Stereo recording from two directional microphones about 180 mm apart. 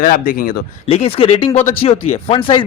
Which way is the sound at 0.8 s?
35° left (ahead or behind).